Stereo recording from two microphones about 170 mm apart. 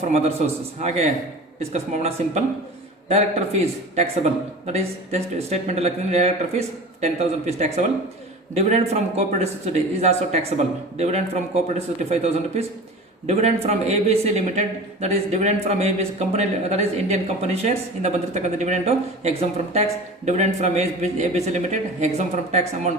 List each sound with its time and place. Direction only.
0.8 s a man's voice: 45° right (ahead or behind)